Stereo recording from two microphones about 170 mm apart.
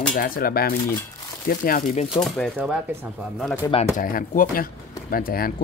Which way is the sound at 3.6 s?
20° left (ahead or behind).